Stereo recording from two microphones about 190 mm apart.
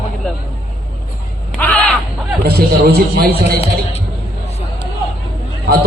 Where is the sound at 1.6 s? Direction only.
10° left (ahead or behind).